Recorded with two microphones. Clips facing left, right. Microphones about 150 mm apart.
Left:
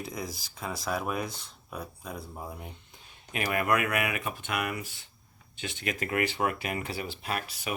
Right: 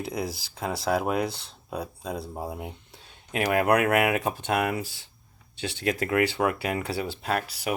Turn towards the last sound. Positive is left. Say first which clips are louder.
# right 6 dB
turn(degrees=-75)  # may be behind; listen again after turning